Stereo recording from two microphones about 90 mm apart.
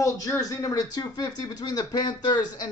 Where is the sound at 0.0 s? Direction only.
40° left (ahead or behind).